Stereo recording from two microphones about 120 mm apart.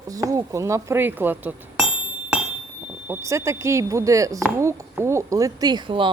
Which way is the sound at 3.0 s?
20° right (ahead or behind).